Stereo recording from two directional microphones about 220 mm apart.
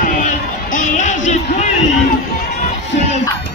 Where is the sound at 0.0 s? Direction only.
35° left (ahead or behind).